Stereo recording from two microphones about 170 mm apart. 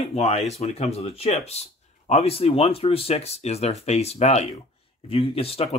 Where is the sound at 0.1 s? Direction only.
40° left (ahead or behind).